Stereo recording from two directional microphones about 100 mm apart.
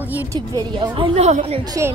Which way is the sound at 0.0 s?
20° right (ahead or behind).